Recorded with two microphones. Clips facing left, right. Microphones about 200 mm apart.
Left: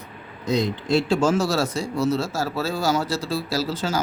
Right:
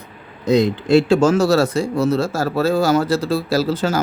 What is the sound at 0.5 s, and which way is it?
Speech, 65° right (ahead or behind).